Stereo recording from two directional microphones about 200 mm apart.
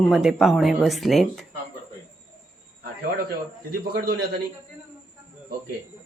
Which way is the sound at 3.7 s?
45° right (ahead or behind).